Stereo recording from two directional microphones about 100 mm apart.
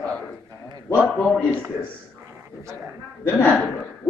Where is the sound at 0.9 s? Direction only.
20° left (ahead or behind).